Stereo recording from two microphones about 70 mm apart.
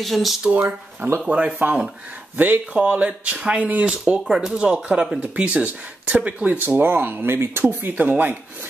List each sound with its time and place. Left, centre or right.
0.0 s speech: centre
0.5 s speech: right
1.2 s speech: centre